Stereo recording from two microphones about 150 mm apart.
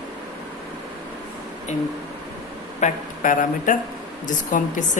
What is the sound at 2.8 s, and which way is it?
Speech, 60° left (ahead or behind).